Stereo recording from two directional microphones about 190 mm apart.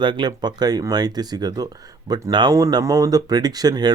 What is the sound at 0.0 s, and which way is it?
Speech, 25° right (ahead or behind).